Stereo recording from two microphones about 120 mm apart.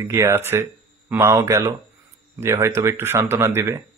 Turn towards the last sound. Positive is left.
turn(degrees=-20)  # may be behind; listen again after turning